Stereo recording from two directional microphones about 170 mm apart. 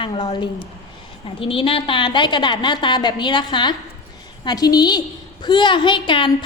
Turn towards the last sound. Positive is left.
turn(degrees=30)  # may be behind; listen again after turning